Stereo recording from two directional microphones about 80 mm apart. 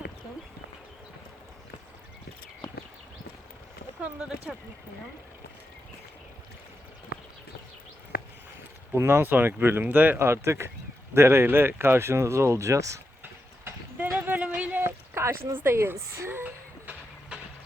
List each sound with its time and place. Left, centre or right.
4.0 s speech: centre
9.0 s speech: right
10.2 s speech: right
13.2 s horse: right
14.2 s a sound: centre